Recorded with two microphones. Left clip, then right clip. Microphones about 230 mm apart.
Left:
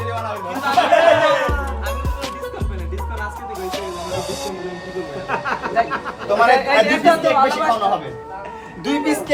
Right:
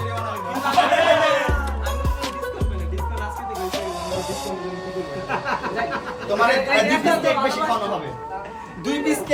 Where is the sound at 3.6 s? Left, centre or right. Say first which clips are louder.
Left 1 dB; centre.